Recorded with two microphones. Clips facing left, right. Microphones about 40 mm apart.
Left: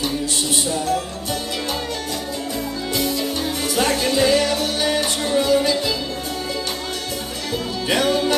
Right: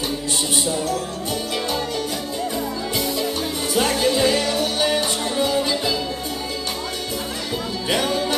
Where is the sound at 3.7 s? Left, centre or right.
Centre.